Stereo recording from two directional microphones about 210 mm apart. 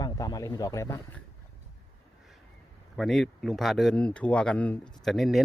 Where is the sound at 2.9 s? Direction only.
Centre (ahead or behind).